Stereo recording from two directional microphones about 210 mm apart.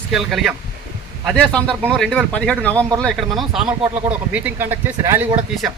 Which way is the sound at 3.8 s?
20° right (ahead or behind).